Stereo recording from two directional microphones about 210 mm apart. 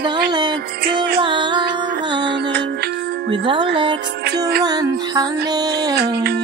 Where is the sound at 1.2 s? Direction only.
20° right (ahead or behind).